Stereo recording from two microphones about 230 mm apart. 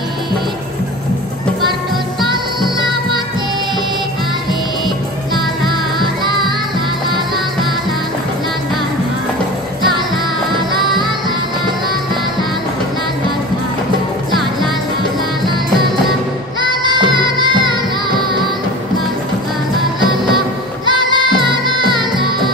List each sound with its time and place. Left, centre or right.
16.8 s music: centre
20.8 s music: centre